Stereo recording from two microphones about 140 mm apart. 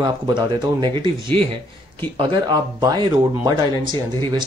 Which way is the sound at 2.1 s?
35° right (ahead or behind).